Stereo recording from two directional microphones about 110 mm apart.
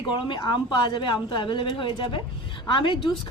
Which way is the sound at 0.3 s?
45° left (ahead or behind).